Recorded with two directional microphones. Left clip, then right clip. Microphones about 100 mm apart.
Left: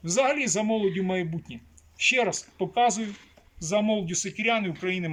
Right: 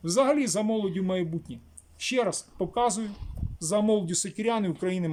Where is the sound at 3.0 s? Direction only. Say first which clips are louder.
Even; 55° right (ahead or behind).